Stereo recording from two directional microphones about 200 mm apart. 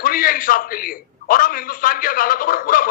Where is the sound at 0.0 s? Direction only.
45° left (ahead or behind).